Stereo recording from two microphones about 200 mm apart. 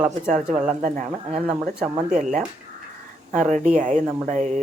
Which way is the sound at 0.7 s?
35° right (ahead or behind).